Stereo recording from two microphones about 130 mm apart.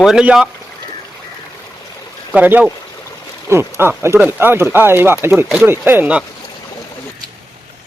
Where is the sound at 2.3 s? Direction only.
15° right (ahead or behind).